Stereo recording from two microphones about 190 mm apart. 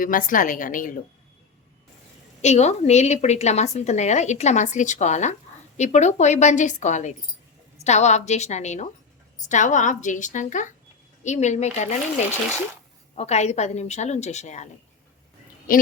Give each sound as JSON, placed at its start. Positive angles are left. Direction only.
{"t": 0.0, "sound": "a woman's voice", "side_deg": 45}
{"t": 2.4, "sound": "speech", "side_deg": 35}
{"t": 13.1, "sound": "speech", "side_deg": 35}